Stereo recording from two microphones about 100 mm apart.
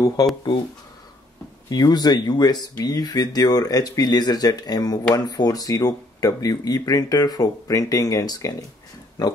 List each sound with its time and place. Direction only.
1.7 s speech: 40° left (ahead or behind)